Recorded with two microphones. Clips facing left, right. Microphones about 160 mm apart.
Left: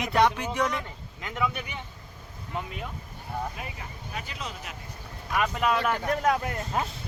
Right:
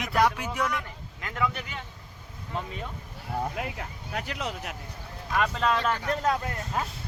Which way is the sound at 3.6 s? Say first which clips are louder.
Right 5 dB; 75° right (ahead or behind).